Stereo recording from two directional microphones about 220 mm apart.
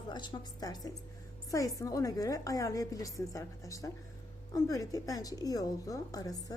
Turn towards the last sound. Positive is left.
turn(degrees=15)  # may be behind; listen again after turning